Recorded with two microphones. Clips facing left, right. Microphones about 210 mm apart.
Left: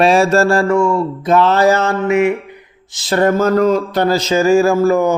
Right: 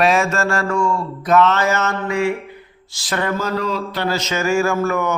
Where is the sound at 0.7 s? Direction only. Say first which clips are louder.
Left 6 dB; 20° left (ahead or behind).